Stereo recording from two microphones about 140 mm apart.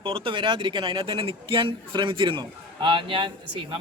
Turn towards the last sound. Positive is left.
turn(degrees=-35)  # may be behind; listen again after turning